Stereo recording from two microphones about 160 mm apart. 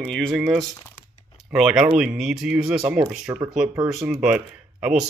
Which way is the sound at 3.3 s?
20° right (ahead or behind).